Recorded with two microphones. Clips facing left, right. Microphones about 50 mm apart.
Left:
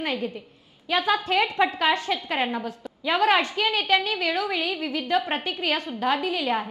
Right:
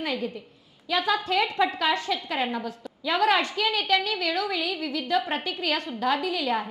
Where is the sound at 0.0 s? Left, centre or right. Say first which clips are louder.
Left 1 dB; left.